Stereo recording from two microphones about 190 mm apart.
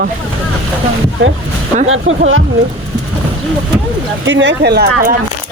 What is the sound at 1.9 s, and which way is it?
Speech, 90° right.